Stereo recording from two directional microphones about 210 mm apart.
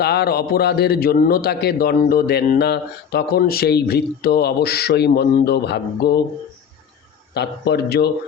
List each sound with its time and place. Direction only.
0.0 s a man's voice: 50° left (ahead or behind)
7.3 s a man's voice: 50° left (ahead or behind)